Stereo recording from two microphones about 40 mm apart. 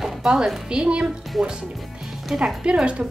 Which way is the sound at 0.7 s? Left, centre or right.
Right.